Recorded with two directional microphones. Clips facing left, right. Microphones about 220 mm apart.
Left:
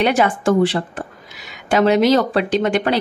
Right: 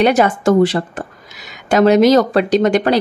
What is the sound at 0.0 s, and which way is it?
Speech, 40° right (ahead or behind).